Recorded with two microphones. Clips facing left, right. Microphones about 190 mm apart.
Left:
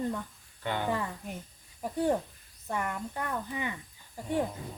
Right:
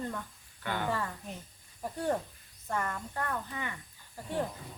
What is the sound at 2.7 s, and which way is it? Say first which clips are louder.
Speech: left 1 dB; 15° left (ahead or behind).